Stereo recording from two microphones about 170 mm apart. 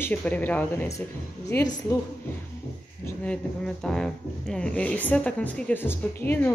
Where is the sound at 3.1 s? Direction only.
5° left (ahead or behind).